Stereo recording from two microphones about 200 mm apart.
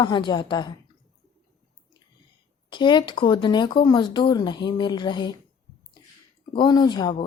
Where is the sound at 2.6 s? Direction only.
25° left (ahead or behind).